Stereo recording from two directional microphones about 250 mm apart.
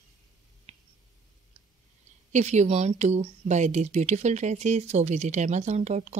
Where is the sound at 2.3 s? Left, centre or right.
Right.